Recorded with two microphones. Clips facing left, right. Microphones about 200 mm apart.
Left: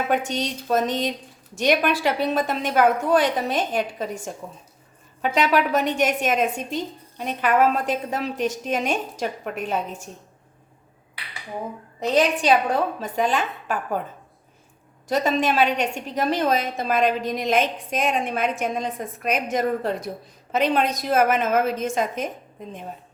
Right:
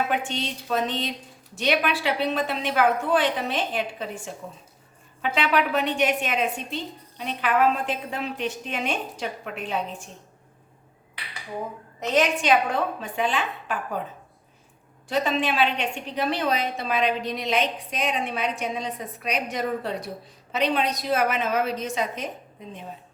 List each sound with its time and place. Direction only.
0.1 s a woman's voice: 45° left (ahead or behind)
11.9 s a woman's voice: 35° left (ahead or behind)
15.1 s a woman's voice: 45° left (ahead or behind)